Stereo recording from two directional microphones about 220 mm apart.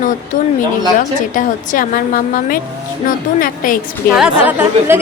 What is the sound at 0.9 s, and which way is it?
A woman's voice, 35° left (ahead or behind).